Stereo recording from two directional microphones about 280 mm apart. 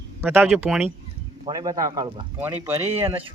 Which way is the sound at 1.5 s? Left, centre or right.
Centre.